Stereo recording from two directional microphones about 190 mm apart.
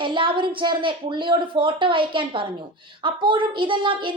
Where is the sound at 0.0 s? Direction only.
25° right (ahead or behind).